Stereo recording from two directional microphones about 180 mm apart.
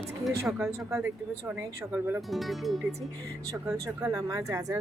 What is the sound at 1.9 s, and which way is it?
Speech, 5° right (ahead or behind).